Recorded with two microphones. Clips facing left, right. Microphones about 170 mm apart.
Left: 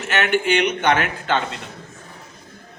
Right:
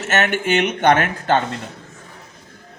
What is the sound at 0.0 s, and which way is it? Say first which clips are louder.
A man's voice: even; 45° right (ahead or behind).